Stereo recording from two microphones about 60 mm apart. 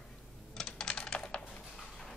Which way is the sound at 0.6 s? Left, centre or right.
Centre.